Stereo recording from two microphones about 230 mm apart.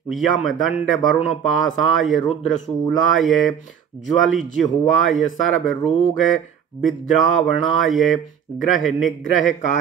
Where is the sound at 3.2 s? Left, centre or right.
Centre.